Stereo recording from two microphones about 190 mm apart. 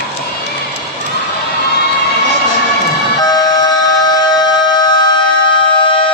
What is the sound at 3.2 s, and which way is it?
Siren, 20° left (ahead or behind).